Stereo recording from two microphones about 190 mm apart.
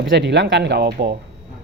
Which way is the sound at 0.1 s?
65° right (ahead or behind).